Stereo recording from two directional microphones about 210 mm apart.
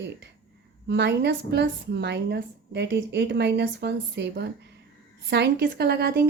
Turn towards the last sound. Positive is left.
turn(degrees=-50)  # may be behind; listen again after turning